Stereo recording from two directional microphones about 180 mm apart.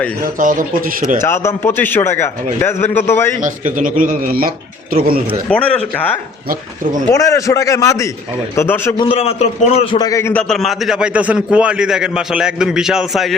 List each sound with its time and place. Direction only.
0.3 s speech: 45° right (ahead or behind)
1.2 s a man's voice: 15° left (ahead or behind)
3.4 s speech: 45° right (ahead or behind)
5.5 s a man's voice: 5° left (ahead or behind)
7.1 s a man's voice: 20° left (ahead or behind)
9.0 s a man's voice: 35° left (ahead or behind); by 10.4 s 15° left (ahead or behind)
10.5 s a man's voice: centre (ahead or behind)